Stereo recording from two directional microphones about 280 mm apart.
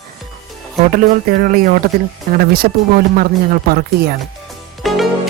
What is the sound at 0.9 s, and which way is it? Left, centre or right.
Speech, right.